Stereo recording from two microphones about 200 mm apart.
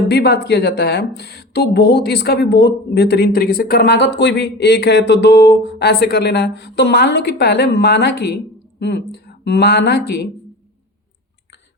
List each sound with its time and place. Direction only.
0.1 s speech: 55° left (ahead or behind)